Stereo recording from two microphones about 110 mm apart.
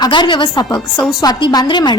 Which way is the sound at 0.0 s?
45° left (ahead or behind).